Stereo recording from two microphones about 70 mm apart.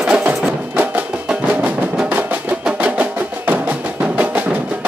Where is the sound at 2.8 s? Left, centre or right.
Right.